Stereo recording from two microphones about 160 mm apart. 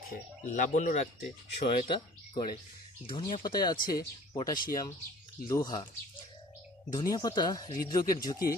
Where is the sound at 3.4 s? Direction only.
25° left (ahead or behind).